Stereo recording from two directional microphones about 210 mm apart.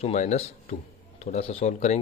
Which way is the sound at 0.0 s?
30° left (ahead or behind).